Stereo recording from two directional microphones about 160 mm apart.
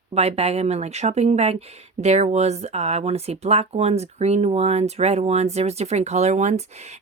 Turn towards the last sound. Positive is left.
turn(degrees=-45)  # may be behind; listen again after turning